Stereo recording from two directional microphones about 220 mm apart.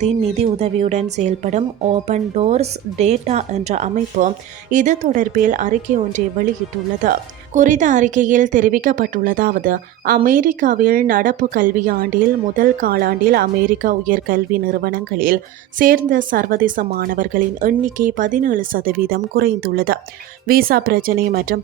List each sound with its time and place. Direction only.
0.0 s speech: 30° right (ahead or behind)